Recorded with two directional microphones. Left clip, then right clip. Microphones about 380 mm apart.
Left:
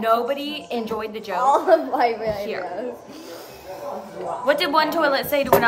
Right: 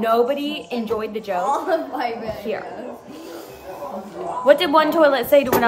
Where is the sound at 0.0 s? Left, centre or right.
Centre.